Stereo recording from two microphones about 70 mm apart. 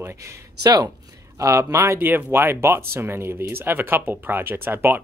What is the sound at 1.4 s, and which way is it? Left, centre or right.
Speech, right.